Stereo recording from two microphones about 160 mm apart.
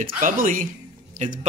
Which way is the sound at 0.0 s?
60° right (ahead or behind).